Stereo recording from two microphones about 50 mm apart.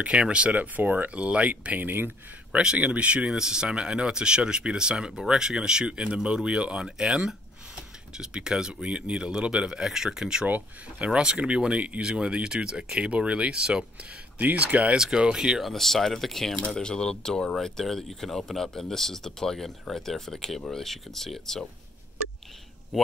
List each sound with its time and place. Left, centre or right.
0.0 s speech: right
2.5 s speech: centre
10.4 s speech: right
11.1 s speech: centre
14.4 s speech: right
15.0 s speech: centre
15.6 s speech: centre